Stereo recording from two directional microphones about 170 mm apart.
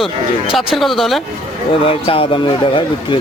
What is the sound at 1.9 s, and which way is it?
Speech, 35° left (ahead or behind).